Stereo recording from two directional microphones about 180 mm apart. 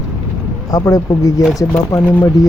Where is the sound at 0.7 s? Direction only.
20° left (ahead or behind).